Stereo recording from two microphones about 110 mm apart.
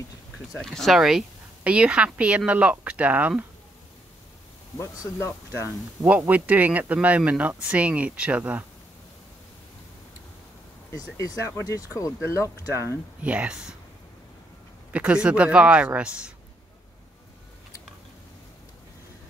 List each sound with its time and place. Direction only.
0.5 s speech: centre (ahead or behind); by 3.4 s 15° right (ahead or behind)
4.7 s speech: 25° left (ahead or behind)
6.0 s speech: 15° right (ahead or behind)
10.9 s speech: 30° left (ahead or behind)
13.2 s speech: 10° right (ahead or behind)
14.9 s speech: 10° right (ahead or behind)